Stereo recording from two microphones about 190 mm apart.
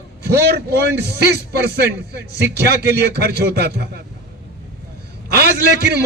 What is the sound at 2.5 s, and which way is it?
A man's voice, 60° right (ahead or behind).